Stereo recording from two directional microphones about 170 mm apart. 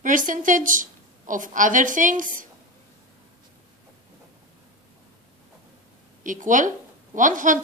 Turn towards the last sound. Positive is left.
turn(degrees=-50)  # may be behind; listen again after turning